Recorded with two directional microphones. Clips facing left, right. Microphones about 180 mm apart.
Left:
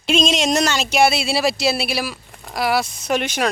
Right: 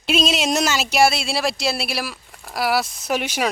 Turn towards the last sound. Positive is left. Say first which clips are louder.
# left 2 dB
turn(degrees=-10)  # may be behind; listen again after turning